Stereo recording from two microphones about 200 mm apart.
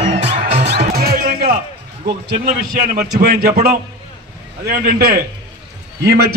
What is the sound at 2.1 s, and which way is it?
A man's voice, 50° right (ahead or behind).